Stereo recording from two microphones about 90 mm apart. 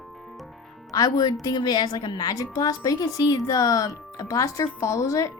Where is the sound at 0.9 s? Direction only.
45° left (ahead or behind).